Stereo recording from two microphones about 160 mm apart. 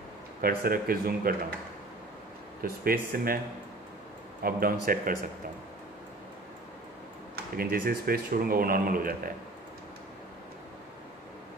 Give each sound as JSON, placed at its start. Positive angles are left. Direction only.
{"t": 0.4, "sound": "speech", "side_deg": -70}
{"t": 2.6, "sound": "speech", "side_deg": -70}
{"t": 4.4, "sound": "speech", "side_deg": -65}
{"t": 7.3, "sound": "speech", "side_deg": -70}